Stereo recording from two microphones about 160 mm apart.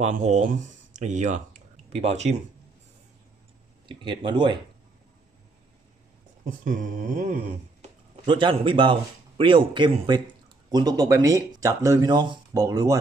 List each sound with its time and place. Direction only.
0.0 s speech: 50° right (ahead or behind)
3.8 s speech: 30° right (ahead or behind)
6.6 s a sound: 55° right (ahead or behind)
8.3 s speech: 30° right (ahead or behind)